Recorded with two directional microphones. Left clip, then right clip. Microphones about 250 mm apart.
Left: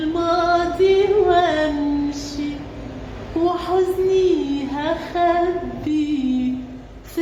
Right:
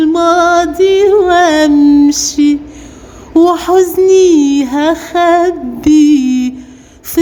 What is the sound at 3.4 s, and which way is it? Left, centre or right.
Speech, right.